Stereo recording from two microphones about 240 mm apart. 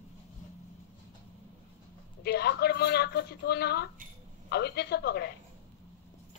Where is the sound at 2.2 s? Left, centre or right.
Left.